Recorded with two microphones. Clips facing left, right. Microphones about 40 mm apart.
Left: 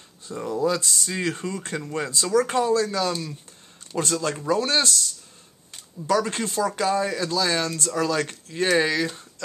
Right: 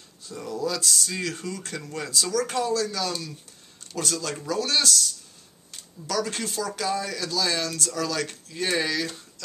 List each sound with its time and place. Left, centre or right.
0.2 s speech: left